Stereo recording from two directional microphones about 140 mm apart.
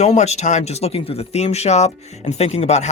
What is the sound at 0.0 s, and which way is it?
Speech, 50° left (ahead or behind).